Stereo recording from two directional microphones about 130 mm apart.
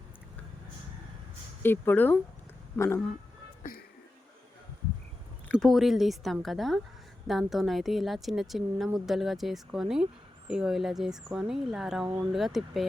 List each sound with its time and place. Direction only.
1.6 s speech: 15° left (ahead or behind)
5.5 s speech: 5° left (ahead or behind)